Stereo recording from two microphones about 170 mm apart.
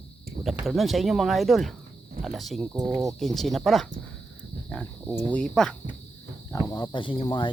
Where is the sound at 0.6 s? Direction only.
Centre (ahead or behind).